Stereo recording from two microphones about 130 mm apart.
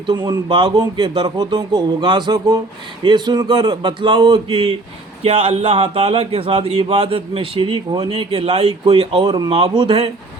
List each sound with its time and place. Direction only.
0.1 s a man's voice: 35° right (ahead or behind); by 7.2 s 55° right (ahead or behind)
7.3 s speech: 40° right (ahead or behind)
8.3 s speech: 50° right (ahead or behind)